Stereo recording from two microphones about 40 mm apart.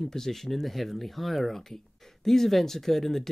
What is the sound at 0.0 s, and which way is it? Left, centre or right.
Speech, centre.